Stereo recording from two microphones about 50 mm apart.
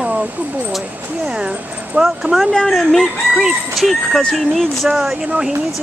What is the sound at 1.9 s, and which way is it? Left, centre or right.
Speech, right.